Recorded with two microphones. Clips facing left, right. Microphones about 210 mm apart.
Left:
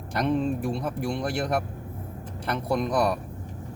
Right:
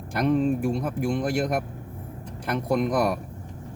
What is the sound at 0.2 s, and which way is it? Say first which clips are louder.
Speech: right 3 dB; 10° right (ahead or behind).